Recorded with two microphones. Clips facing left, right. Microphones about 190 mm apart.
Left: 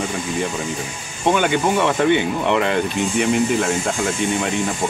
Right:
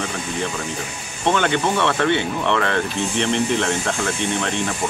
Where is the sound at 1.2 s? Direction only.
10° left (ahead or behind).